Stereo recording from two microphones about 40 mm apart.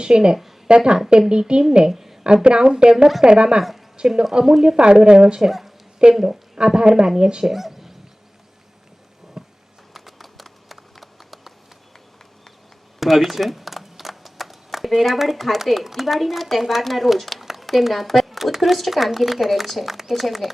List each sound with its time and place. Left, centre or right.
0.0 s speech: centre
1.9 s a woman's voice: centre
2.2 s speech: right
3.6 s a woman's voice: centre
3.9 s speech: centre
5.5 s speech: centre; by 7.4 s right
7.4 s a sound: centre
9.4 s a sound: centre
9.9 s a sound: centre
13.0 s speech: centre